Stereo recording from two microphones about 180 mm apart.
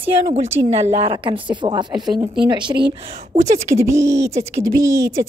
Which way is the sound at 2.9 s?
40° right (ahead or behind).